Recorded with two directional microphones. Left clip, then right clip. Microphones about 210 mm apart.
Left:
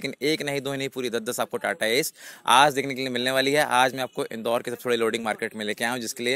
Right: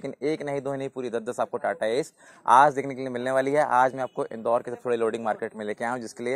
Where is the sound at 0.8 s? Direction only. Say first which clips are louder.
Left 2 dB; 45° left (ahead or behind).